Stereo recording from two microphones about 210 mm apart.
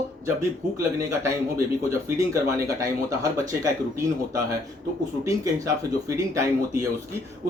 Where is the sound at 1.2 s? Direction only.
15° right (ahead or behind).